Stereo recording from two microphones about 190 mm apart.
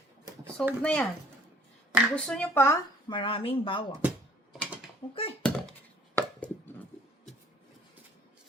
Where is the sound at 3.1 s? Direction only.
25° left (ahead or behind).